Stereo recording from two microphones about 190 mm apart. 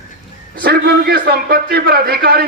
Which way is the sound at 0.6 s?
55° right (ahead or behind).